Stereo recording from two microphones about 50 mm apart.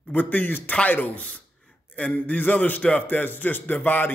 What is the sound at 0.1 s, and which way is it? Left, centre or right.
A man's voice, left.